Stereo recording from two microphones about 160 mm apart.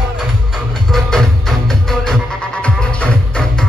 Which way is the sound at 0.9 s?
Centre (ahead or behind).